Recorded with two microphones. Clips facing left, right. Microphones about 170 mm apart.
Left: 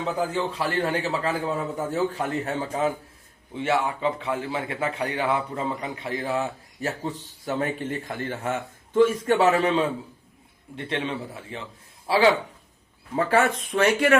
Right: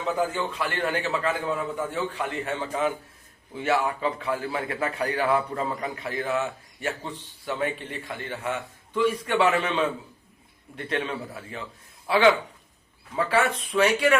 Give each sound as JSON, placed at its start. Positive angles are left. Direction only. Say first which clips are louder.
{"t": 0.3, "sound": "a man's voice", "louder": "left 3 dB", "side_deg": 30}
{"t": 3.5, "sound": "a man's voice", "louder": "even", "side_deg": 25}
{"t": 13.1, "sound": "speech", "louder": "left 2 dB", "side_deg": 45}